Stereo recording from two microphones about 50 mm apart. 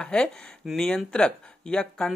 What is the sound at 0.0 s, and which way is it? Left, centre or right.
Speech, centre.